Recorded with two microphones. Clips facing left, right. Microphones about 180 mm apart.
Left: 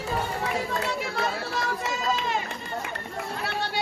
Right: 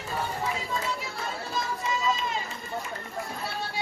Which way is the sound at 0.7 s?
70° left (ahead or behind).